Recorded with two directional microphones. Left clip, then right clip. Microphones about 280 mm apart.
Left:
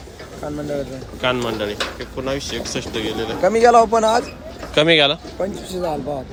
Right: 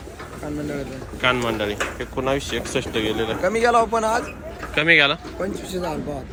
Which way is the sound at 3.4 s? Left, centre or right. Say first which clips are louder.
Left 6 dB; left.